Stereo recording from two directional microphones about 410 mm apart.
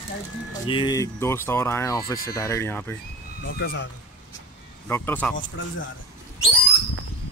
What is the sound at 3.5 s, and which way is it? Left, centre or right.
Speech, left.